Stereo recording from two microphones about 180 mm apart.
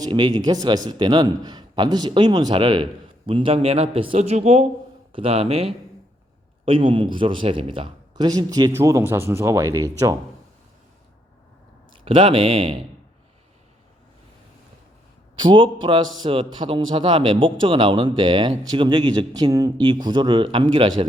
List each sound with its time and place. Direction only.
0.0 s a man's voice: 25° right (ahead or behind)
11.9 s speech: 30° right (ahead or behind)
15.4 s a man's voice: 30° right (ahead or behind)